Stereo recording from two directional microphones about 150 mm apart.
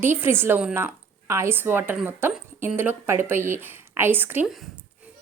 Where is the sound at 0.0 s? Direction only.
15° right (ahead or behind).